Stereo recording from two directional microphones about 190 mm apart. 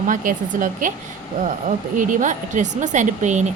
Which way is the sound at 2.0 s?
40° right (ahead or behind).